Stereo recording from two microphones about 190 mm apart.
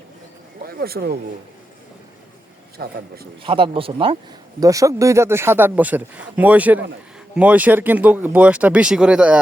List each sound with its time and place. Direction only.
0.7 s a man's voice: 55° right (ahead or behind)
2.7 s a man's voice: 55° right (ahead or behind)
3.4 s speech: 25° right (ahead or behind)
4.6 s speech: 15° right (ahead or behind)